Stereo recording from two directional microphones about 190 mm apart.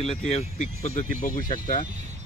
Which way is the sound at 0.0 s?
35° left (ahead or behind).